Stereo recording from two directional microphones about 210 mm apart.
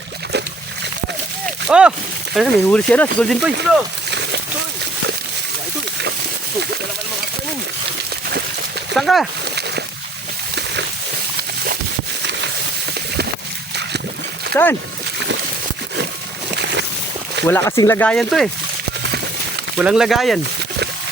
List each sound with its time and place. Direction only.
1.6 s speech: 5° right (ahead or behind)
9.0 s speech: centre (ahead or behind)
12.2 s a sound: 55° right (ahead or behind)
14.5 s speech: 10° left (ahead or behind)
17.4 s speech: 10° left (ahead or behind)
19.8 s speech: 5° right (ahead or behind)